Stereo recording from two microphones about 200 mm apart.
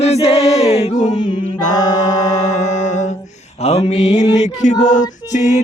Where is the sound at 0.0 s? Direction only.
30° left (ahead or behind).